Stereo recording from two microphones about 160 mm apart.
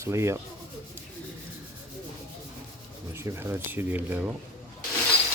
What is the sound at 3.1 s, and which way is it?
Speech, 15° right (ahead or behind).